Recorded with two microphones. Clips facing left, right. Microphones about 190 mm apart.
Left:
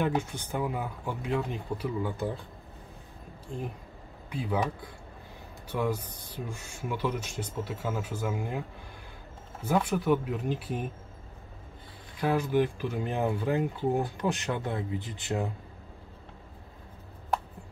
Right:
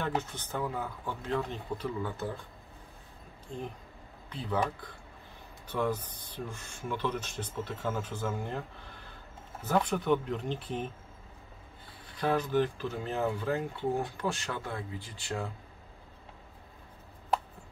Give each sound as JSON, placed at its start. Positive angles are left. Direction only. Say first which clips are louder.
{"t": 0.0, "sound": "speech", "louder": "left 4 dB", "side_deg": 10}
{"t": 4.3, "sound": "speech", "louder": "left 2 dB", "side_deg": 10}
{"t": 12.2, "sound": "speech", "louder": "left 2 dB", "side_deg": 10}